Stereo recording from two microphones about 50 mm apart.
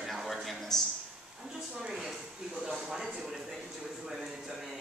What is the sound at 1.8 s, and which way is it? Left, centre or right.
Speech, centre.